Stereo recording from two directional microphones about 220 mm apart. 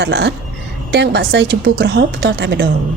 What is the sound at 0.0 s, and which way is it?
Speech, 50° right (ahead or behind).